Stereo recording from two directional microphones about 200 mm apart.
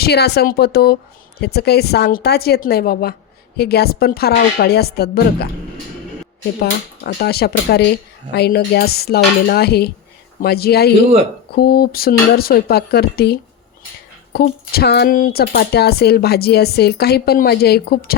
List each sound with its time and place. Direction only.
0.0 s speech: 55° left (ahead or behind)
6.6 s speech: 50° left (ahead or behind)